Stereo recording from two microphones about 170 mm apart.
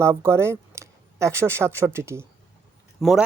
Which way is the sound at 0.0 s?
15° right (ahead or behind).